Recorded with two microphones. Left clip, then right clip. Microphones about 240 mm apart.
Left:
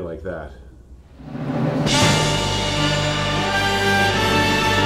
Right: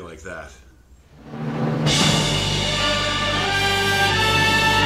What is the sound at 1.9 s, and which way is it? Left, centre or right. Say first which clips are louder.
Music: left 1 dB; centre.